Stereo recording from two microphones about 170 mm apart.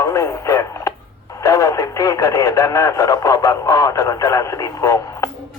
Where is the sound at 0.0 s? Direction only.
15° left (ahead or behind).